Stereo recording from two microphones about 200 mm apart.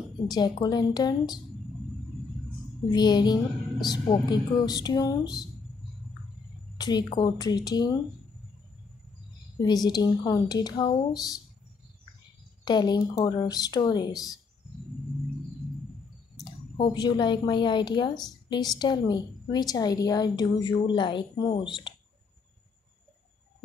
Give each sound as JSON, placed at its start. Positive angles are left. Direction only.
{"t": 0.3, "sound": "a woman's voice", "side_deg": 20}
{"t": 2.9, "sound": "a woman's voice", "side_deg": 20}
{"t": 6.8, "sound": "a woman's voice", "side_deg": 20}
{"t": 9.6, "sound": "a woman's voice", "side_deg": 20}
{"t": 12.6, "sound": "a woman's voice", "side_deg": 20}
{"t": 16.7, "sound": "a woman's voice", "side_deg": 25}